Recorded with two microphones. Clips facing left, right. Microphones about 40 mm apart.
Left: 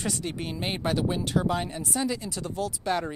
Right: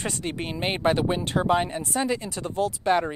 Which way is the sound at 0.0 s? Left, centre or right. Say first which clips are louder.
Right 2 dB; right.